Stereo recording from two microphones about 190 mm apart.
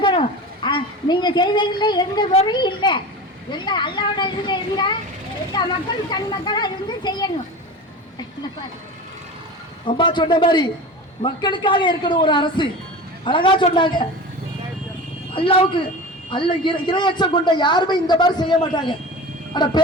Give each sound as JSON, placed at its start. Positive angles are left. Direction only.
{"t": 0.0, "sound": "a woman's voice", "side_deg": 25}
{"t": 9.8, "sound": "a man's voice", "side_deg": 25}
{"t": 15.3, "sound": "a man's voice", "side_deg": 30}